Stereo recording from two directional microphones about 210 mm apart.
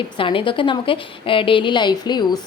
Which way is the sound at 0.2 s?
25° left (ahead or behind).